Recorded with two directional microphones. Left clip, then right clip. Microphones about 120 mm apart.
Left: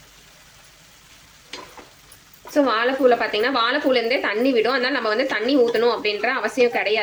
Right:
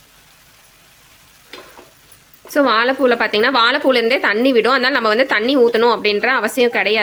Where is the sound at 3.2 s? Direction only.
90° right.